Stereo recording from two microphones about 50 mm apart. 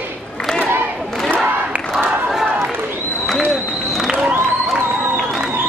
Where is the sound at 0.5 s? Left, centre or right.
Right.